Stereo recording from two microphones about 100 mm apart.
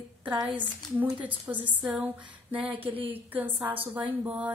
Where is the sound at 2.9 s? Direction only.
70° right (ahead or behind).